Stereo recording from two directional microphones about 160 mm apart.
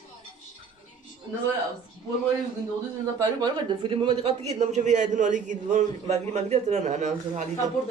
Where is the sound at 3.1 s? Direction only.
25° right (ahead or behind); by 7.4 s 50° right (ahead or behind).